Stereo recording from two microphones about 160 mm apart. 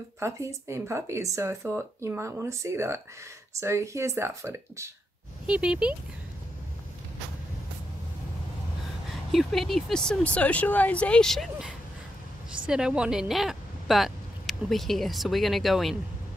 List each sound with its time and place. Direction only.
0.2 s speech: 15° right (ahead or behind)
5.5 s speech: 5° right (ahead or behind)
9.1 s speech: centre (ahead or behind)
12.6 s a woman's voice: 5° right (ahead or behind)